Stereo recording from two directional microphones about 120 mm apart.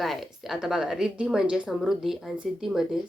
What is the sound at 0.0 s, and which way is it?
Speech, centre (ahead or behind).